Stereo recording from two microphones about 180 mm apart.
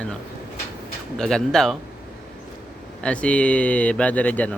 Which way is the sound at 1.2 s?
5° left (ahead or behind).